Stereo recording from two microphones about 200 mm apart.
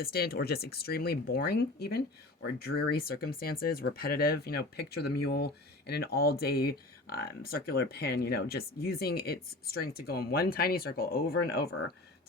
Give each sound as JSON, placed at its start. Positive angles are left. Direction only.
{"t": 0.0, "sound": "speech", "side_deg": 50}